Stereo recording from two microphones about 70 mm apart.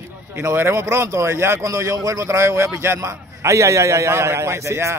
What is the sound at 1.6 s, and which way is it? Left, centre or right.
A man's voice, right.